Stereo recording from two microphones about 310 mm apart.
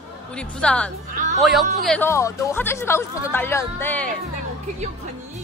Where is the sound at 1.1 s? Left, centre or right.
Right.